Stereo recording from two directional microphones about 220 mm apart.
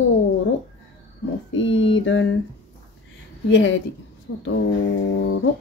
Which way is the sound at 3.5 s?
55° left (ahead or behind).